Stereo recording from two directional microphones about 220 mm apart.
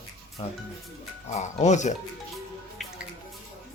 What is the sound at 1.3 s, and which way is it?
Speech, 30° left (ahead or behind).